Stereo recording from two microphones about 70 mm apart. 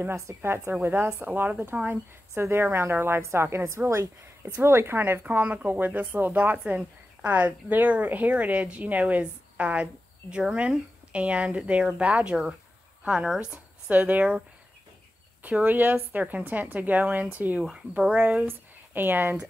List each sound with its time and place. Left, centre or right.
0.0 s a woman's voice: right
1.2 s a woman's voice: right
5.2 s a woman's voice: right
13.8 s a woman's voice: right
15.4 s a woman's voice: right